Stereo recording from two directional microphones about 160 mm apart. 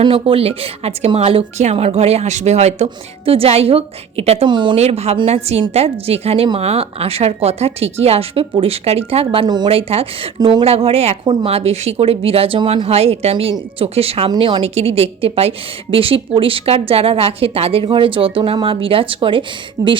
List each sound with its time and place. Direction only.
0.0 s a woman's voice: 35° right (ahead or behind)
4.8 s a woman's voice: 40° right (ahead or behind)
10.4 s speech: 25° right (ahead or behind)
10.7 s a woman's voice: 40° right (ahead or behind)